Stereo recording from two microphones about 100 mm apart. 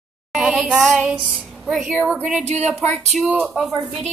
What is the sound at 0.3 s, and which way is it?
Child singing, 10° right (ahead or behind).